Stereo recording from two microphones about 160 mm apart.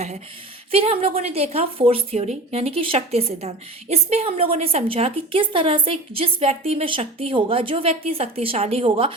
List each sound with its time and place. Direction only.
0.7 s speech: 35° right (ahead or behind)